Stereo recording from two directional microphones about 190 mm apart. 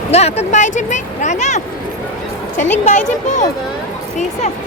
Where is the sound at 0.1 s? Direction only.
35° left (ahead or behind).